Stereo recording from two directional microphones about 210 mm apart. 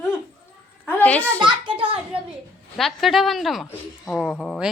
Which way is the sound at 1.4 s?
25° right (ahead or behind).